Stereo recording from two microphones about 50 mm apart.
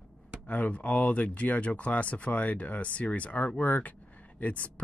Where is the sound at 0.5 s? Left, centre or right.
Left.